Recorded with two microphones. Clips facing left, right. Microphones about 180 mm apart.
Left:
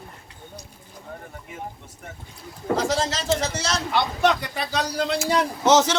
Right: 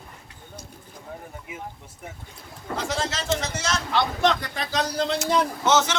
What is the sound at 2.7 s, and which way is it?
Speech, 40° left (ahead or behind).